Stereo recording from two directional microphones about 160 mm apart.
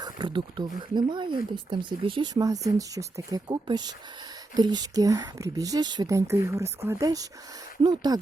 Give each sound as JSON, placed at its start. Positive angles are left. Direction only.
{"t": 0.0, "sound": "speech", "side_deg": -30}